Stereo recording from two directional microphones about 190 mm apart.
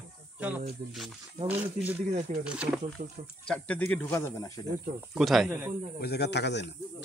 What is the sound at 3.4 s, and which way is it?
Speech, 5° left (ahead or behind).